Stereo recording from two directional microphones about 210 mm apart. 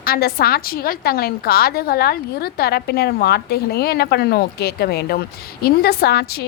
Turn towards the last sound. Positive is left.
turn(degrees=50)  # may be behind; listen again after turning